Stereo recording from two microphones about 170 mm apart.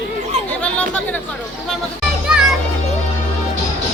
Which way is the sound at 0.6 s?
5° left (ahead or behind).